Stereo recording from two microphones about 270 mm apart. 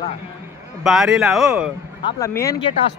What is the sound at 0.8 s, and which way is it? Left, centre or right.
Speech, centre.